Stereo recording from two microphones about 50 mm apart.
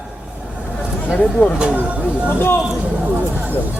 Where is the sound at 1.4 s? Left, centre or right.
Left.